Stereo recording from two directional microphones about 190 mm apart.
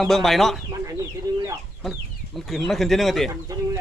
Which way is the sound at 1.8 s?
Centre (ahead or behind).